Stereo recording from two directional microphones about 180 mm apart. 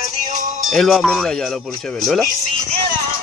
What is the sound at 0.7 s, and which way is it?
Speech, centre (ahead or behind).